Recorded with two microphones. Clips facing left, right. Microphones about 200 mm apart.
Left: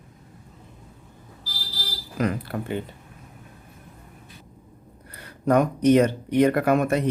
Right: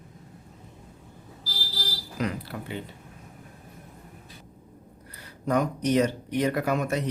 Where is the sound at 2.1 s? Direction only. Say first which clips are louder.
Left 5 dB; 50° left (ahead or behind).